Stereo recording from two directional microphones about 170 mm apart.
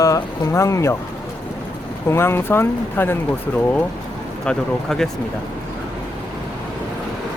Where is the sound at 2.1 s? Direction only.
15° left (ahead or behind).